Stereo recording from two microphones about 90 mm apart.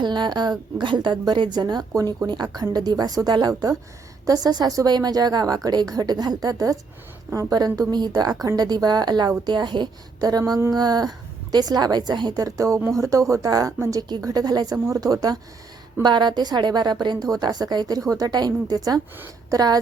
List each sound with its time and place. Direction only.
0.0 s a sound: 55° right (ahead or behind)
0.8 s a woman's voice: 60° right (ahead or behind); by 2.1 s 40° right (ahead or behind)
2.2 s a woman's voice: 50° right (ahead or behind)
16.0 s a woman's voice: 55° right (ahead or behind)